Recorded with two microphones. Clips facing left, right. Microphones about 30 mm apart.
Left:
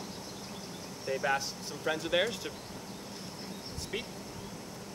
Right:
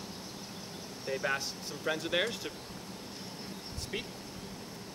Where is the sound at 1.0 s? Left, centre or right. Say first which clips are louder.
Left 2 dB; centre.